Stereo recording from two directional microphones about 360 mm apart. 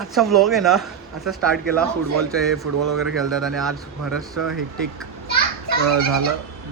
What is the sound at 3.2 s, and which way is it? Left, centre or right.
Speech, centre.